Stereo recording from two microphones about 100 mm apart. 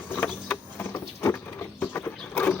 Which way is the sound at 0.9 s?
25° left (ahead or behind).